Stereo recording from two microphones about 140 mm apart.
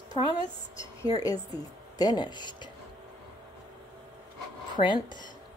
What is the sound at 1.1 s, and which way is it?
Speech, 25° left (ahead or behind).